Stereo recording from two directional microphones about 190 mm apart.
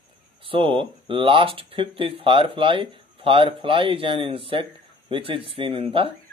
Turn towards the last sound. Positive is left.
turn(degrees=-30)  # may be behind; listen again after turning